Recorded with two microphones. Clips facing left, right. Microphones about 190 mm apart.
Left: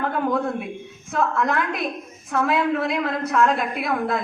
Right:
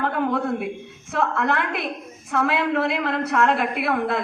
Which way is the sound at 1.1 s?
70° right (ahead or behind).